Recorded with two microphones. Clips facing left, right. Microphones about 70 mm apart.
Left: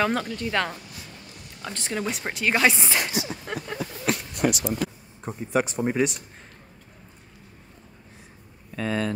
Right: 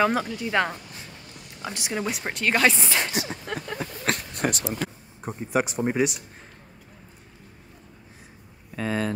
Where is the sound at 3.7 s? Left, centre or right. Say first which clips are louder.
Left 2 dB; right.